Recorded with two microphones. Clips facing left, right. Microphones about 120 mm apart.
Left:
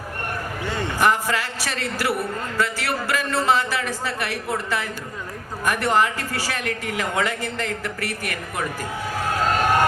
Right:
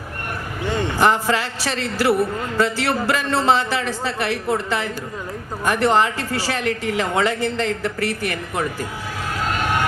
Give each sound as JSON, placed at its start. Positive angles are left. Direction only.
{"t": 0.7, "sound": "a man's voice", "side_deg": -25}